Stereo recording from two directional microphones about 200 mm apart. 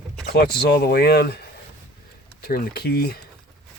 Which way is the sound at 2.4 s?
50° left (ahead or behind).